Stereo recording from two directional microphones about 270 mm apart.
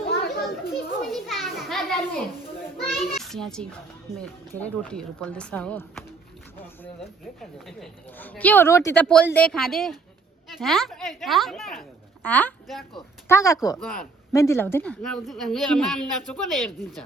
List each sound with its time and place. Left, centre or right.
0.0 s children playing: left
1.1 s children playing: centre
2.8 s a child's voice: centre
7.8 s a woman's voice: centre